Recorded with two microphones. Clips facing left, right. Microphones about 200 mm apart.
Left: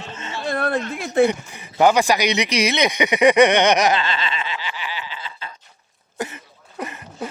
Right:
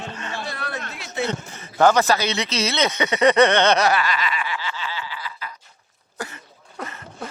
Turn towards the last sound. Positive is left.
turn(degrees=15)  # may be behind; listen again after turning